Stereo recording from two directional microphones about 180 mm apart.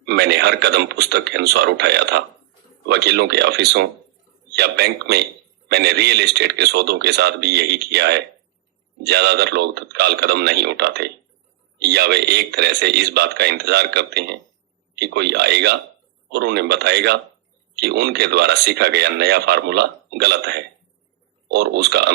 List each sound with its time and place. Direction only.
0.0 s a man's voice: 65° right (ahead or behind)